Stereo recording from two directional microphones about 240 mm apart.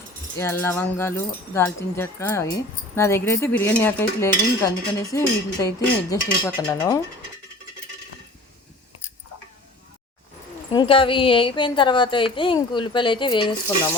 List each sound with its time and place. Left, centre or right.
0.3 s speech: centre
10.7 s a woman's voice: centre